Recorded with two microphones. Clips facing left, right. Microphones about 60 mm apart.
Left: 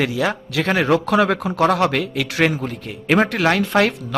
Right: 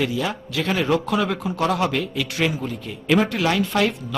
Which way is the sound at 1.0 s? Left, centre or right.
Left.